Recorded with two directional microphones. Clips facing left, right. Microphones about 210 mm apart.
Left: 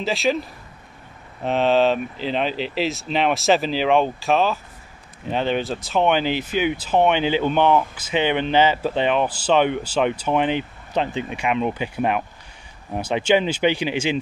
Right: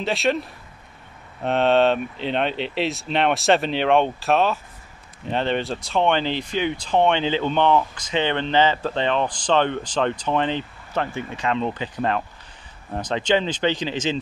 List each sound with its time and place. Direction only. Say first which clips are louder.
0.0 s speech: left 1 dB; centre (ahead or behind)